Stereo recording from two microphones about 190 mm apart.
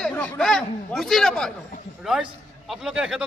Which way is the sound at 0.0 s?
5° left (ahead or behind).